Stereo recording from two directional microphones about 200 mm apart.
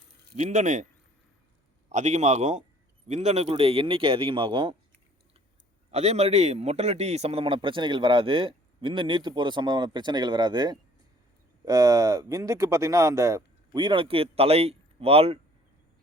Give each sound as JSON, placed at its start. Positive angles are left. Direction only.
{"t": 0.3, "sound": "a man's voice", "side_deg": -40}
{"t": 1.9, "sound": "a man's voice", "side_deg": -35}
{"t": 5.9, "sound": "a man's voice", "side_deg": -35}